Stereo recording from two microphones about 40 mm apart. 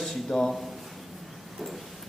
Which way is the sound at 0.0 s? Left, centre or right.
Centre.